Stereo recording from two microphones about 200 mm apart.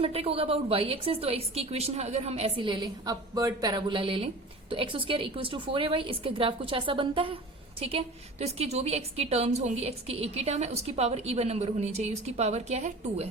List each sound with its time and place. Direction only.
0.0 s a woman's voice: 30° right (ahead or behind)